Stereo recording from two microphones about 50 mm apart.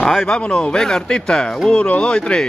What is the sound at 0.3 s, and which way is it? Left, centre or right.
Speech, left.